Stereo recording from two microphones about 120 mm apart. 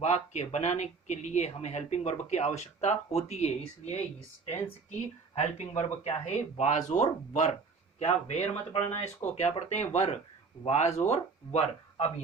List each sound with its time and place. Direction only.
0.0 s speech: 65° left (ahead or behind)
5.3 s speech: 65° left (ahead or behind)
7.9 s speech: 65° left (ahead or behind)